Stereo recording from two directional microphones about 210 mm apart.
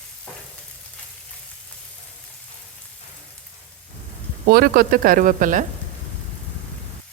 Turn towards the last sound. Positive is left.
turn(degrees=-40)  # may be behind; listen again after turning